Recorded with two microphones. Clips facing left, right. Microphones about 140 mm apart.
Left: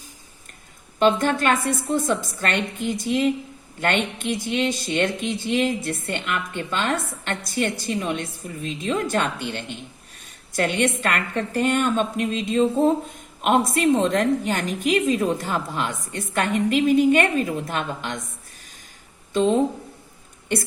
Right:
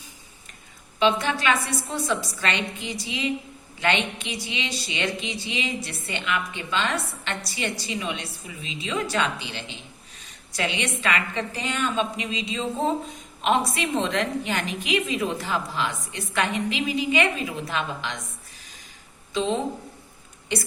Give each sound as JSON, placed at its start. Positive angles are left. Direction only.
{"t": 0.9, "sound": "a woman's voice", "side_deg": 50}
{"t": 19.3, "sound": "speech", "side_deg": 50}